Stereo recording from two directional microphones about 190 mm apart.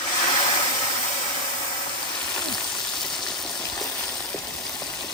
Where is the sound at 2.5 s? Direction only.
5° left (ahead or behind).